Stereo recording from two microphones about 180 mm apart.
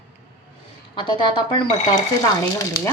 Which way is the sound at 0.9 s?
25° left (ahead or behind).